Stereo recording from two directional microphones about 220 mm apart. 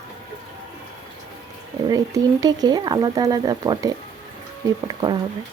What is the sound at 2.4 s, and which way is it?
Speech, 15° right (ahead or behind).